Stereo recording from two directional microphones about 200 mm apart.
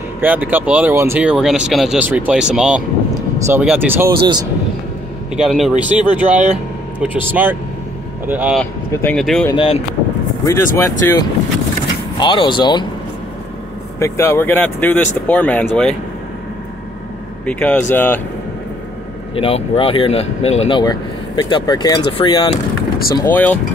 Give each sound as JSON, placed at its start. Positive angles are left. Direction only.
{"t": 0.2, "sound": "speech", "side_deg": -10}
{"t": 4.2, "sound": "speech", "side_deg": -20}
{"t": 5.3, "sound": "speech", "side_deg": 0}
{"t": 8.3, "sound": "speech", "side_deg": -10}
{"t": 8.5, "sound": "speech", "side_deg": 5}
{"t": 9.5, "sound": "speech", "side_deg": 25}
{"t": 10.4, "sound": "speech", "side_deg": 15}
{"t": 12.2, "sound": "speech", "side_deg": 25}
{"t": 13.9, "sound": "speech", "side_deg": 15}
{"t": 17.5, "sound": "speech", "side_deg": 10}
{"t": 19.3, "sound": "speech", "side_deg": 30}
{"t": 23.1, "sound": "speech", "side_deg": 10}